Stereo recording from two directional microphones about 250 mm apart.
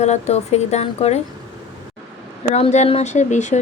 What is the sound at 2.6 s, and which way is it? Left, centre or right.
Speech, left.